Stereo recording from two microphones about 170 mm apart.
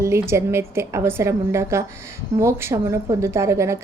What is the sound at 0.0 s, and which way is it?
A woman's voice, 15° right (ahead or behind).